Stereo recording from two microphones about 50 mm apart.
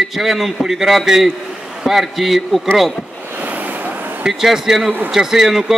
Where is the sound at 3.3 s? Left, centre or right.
Right.